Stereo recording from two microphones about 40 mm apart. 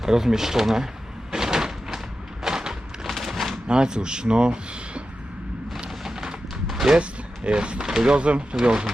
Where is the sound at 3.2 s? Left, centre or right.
Centre.